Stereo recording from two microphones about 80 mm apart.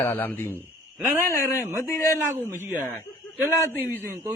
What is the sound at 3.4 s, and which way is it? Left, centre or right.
Speech, right.